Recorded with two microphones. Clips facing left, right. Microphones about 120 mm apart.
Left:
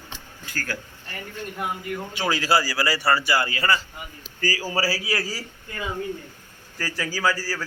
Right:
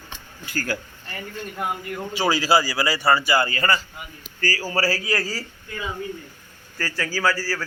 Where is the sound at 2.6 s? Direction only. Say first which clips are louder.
Right 1 dB; 20° right (ahead or behind).